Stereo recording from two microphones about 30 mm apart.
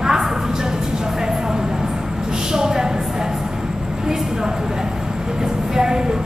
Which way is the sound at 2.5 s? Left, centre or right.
Right.